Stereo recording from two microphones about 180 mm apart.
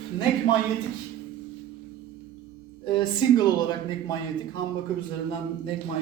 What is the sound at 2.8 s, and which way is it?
Speech, 25° left (ahead or behind).